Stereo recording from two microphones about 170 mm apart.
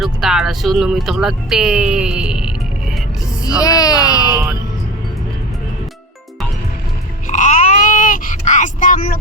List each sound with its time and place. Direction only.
0.0 s speech: centre (ahead or behind)
3.4 s speech: 20° left (ahead or behind)
7.3 s a sound: 45° left (ahead or behind)